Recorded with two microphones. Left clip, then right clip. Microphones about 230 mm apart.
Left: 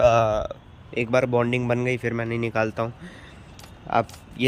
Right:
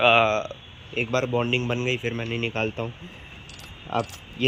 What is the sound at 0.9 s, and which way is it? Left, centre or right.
A man's voice, centre.